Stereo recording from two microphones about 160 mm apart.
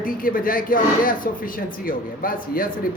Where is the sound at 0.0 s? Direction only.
60° left (ahead or behind).